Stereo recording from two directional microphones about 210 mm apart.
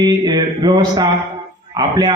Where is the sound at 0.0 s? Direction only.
20° right (ahead or behind).